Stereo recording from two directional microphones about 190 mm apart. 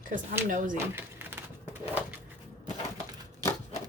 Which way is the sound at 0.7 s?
10° right (ahead or behind).